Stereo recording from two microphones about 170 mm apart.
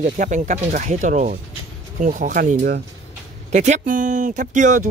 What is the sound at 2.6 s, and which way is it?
Speech, 75° right (ahead or behind).